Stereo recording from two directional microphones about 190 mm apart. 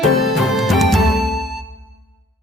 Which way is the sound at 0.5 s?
Centre (ahead or behind).